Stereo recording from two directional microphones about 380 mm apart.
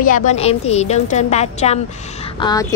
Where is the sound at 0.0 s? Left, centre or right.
Centre.